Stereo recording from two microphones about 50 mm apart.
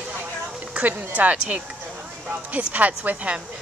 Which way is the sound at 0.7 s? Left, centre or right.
Right.